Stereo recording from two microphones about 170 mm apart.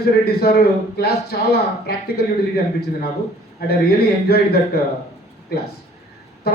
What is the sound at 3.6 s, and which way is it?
Speech, 70° left (ahead or behind).